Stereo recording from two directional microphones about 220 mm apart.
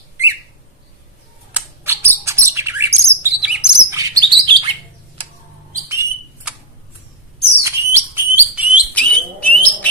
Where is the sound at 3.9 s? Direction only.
20° right (ahead or behind).